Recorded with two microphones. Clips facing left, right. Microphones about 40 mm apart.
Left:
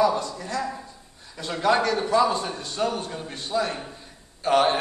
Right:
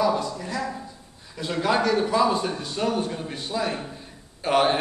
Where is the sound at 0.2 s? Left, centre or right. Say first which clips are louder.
Even; centre.